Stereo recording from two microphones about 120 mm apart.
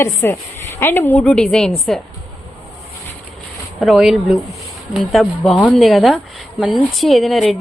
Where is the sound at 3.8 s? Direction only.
Centre (ahead or behind).